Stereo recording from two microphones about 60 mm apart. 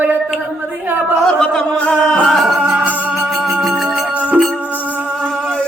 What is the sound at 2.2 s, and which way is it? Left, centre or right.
Music, centre.